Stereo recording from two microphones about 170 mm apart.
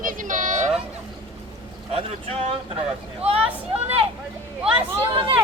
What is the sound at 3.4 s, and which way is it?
Vehicle, 10° right (ahead or behind).